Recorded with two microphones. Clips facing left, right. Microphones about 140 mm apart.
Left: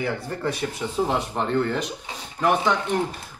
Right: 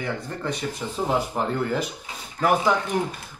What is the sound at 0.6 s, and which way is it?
A man's voice, centre (ahead or behind).